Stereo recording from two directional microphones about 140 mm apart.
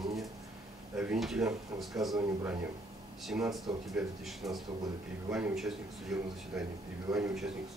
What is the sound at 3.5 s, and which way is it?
Speech, centre (ahead or behind).